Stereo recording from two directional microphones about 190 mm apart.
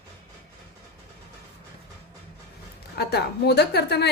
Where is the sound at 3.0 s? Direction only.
60° left (ahead or behind).